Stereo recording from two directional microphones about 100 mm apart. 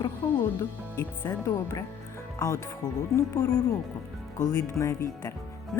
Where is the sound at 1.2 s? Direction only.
35° left (ahead or behind).